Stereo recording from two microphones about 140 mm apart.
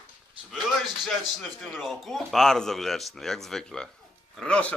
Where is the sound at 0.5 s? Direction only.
Centre (ahead or behind).